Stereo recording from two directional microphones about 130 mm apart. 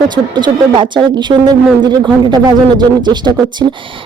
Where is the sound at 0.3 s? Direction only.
35° right (ahead or behind).